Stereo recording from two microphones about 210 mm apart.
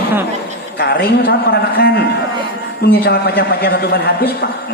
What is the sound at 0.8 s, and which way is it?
A man's voice, 45° left (ahead or behind).